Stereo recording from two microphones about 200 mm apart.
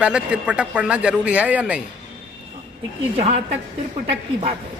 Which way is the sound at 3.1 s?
35° right (ahead or behind).